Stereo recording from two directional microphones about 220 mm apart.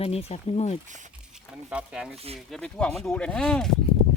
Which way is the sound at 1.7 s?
5° right (ahead or behind).